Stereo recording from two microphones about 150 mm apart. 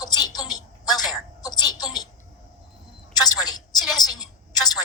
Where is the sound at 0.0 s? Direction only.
25° left (ahead or behind).